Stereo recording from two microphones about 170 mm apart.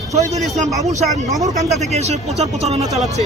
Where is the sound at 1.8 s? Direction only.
40° right (ahead or behind).